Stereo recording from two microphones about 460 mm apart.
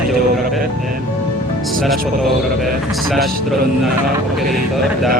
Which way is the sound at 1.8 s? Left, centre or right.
Centre.